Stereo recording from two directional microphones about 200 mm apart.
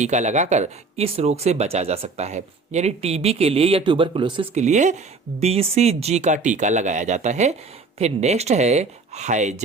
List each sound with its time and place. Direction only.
0.0 s speech: 35° right (ahead or behind)